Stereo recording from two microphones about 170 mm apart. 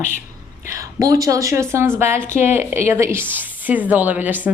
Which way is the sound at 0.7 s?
20° right (ahead or behind).